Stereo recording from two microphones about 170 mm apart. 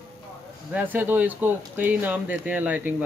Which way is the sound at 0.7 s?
10° right (ahead or behind).